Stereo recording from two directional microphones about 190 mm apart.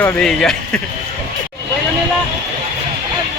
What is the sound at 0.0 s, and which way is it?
Speech, 5° left (ahead or behind).